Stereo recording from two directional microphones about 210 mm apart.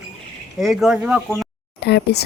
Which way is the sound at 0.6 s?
Centre (ahead or behind).